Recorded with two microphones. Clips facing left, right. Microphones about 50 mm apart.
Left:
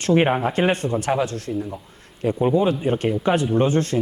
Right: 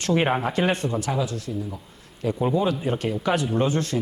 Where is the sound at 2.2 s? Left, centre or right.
Left.